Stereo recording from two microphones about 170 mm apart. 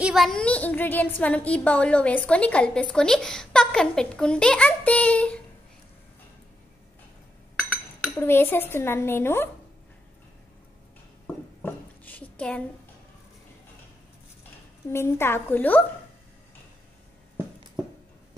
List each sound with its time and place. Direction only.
0.0 s a woman's voice: centre (ahead or behind)
8.2 s a woman's voice: 15° left (ahead or behind)
11.2 s a sound: 10° left (ahead or behind)
14.9 s a woman's voice: 15° left (ahead or behind)